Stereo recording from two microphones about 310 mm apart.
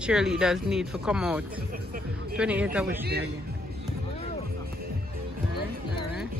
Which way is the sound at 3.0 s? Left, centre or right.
Right.